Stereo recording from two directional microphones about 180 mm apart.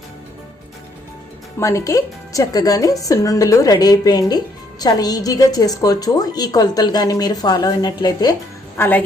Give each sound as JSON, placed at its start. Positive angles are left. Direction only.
{"t": 1.5, "sound": "a woman's voice", "side_deg": 15}
{"t": 8.8, "sound": "a woman's voice", "side_deg": 10}